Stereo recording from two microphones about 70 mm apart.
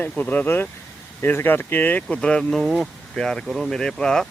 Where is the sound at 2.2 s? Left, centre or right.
Centre.